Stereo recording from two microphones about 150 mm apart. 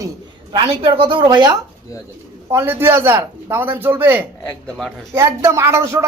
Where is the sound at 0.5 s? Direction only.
35° right (ahead or behind).